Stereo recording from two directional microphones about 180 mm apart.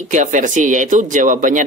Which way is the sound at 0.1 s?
45° right (ahead or behind).